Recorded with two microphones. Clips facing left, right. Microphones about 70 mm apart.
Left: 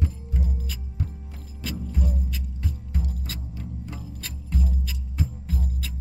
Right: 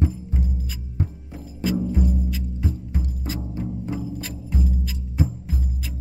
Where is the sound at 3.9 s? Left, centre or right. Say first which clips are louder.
Right 9 dB; centre.